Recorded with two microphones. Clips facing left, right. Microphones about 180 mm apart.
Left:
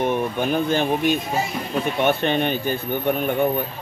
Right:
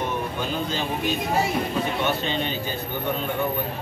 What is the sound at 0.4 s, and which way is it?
Speech, 60° left (ahead or behind).